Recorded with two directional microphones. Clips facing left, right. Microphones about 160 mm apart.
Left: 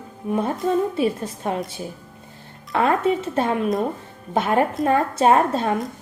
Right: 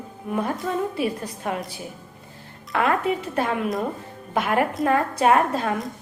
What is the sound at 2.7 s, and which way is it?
A woman's voice, 25° left (ahead or behind).